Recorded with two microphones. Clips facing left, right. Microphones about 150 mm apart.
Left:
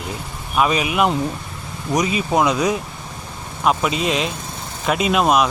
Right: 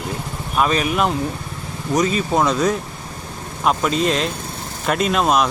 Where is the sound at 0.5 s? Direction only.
5° left (ahead or behind).